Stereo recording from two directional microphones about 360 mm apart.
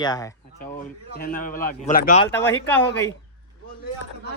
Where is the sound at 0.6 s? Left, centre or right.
Left.